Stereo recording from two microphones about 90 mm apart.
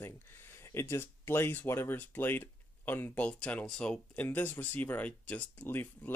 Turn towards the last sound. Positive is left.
turn(degrees=20)  # may be behind; listen again after turning